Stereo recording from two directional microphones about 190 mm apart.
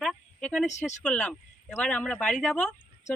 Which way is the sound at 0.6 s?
40° left (ahead or behind).